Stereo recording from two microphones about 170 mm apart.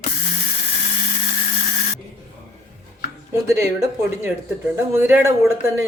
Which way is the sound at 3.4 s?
15° right (ahead or behind).